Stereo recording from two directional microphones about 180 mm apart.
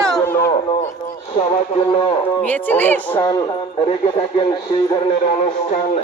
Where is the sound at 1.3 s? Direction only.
25° left (ahead or behind).